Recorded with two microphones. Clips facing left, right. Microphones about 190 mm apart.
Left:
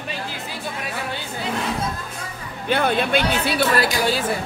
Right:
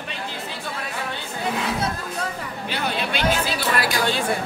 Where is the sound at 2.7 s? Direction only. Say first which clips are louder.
Left 8 dB; 50° left (ahead or behind).